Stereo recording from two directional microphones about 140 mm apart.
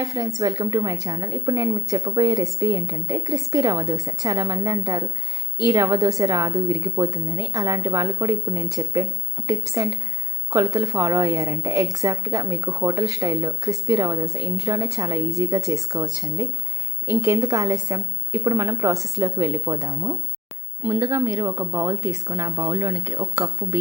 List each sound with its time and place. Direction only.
0.0 s a woman's voice: 25° right (ahead or behind)